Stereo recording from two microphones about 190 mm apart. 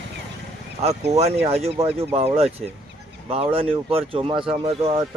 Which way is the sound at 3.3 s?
30° right (ahead or behind).